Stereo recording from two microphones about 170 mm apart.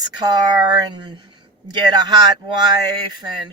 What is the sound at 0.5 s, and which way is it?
Speech, 25° right (ahead or behind).